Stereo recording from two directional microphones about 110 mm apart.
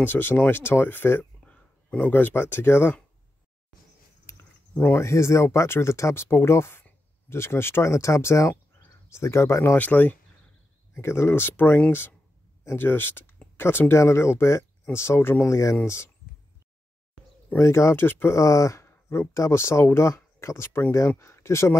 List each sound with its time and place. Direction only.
0.0 s speech: 20° left (ahead or behind)
4.3 s a sound: 25° left (ahead or behind)
4.9 s speech: 25° left (ahead or behind)
17.5 s speech: 25° left (ahead or behind)